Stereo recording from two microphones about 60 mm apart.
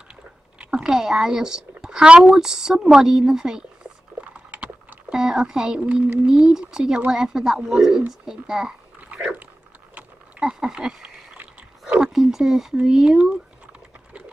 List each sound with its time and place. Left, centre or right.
0.1 s chewing: centre
0.8 s a woman's voice: centre
4.5 s a sound: right
5.1 s speech: centre
5.9 s speech: right
6.2 s a woman's voice: centre
9.1 s dog: right
10.4 s a woman's voice: centre